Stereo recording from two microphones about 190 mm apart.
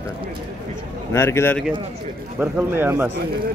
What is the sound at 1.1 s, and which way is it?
Speech, 15° left (ahead or behind).